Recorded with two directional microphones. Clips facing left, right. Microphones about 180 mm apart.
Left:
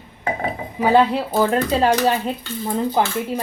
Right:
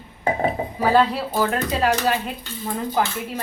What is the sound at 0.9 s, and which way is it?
Speech, 20° left (ahead or behind).